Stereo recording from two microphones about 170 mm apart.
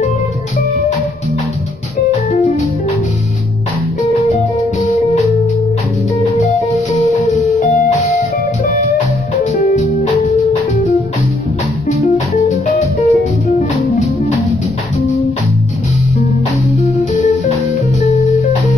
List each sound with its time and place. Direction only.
4.0 s music: 40° left (ahead or behind)
7.3 s music: 40° left (ahead or behind)
9.4 s music: 40° left (ahead or behind)
12.0 s music: 40° left (ahead or behind)
16.8 s guitar: 40° left (ahead or behind)